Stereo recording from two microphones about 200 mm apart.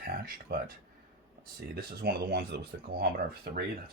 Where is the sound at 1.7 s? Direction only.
50° right (ahead or behind).